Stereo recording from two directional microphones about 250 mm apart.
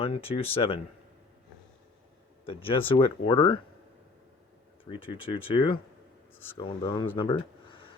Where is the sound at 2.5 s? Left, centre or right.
Left.